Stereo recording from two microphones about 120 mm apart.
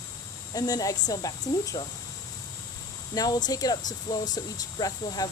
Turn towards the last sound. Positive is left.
turn(degrees=30)  # may be behind; listen again after turning